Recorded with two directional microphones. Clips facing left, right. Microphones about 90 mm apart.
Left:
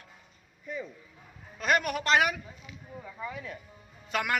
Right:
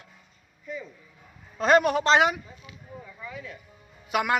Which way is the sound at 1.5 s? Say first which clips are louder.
Right 7 dB; 30° right (ahead or behind).